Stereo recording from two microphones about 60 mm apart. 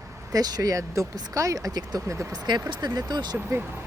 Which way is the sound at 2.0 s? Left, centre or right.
Right.